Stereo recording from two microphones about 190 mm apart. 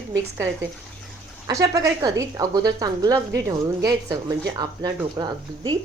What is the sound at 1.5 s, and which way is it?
A woman's voice, 20° right (ahead or behind).